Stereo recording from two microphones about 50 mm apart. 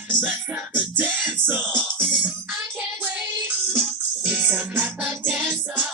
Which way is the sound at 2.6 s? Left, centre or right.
Right.